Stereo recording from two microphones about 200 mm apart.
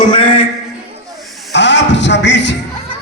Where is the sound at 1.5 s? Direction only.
60° left (ahead or behind).